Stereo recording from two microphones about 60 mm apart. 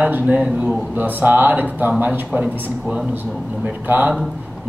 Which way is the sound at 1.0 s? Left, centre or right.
Right.